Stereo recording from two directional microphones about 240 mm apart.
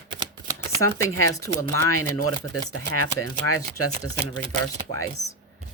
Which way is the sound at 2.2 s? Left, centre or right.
Left.